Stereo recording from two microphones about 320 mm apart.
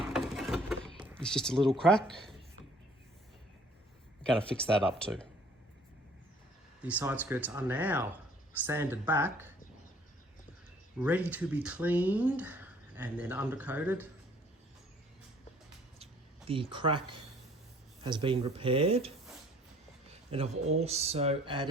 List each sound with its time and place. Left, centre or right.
0.0 s mechanisms: centre
0.9 s speech: centre
4.2 s speech: centre
6.8 s speech: centre
11.0 s speech: centre
16.5 s speech: centre
20.3 s speech: centre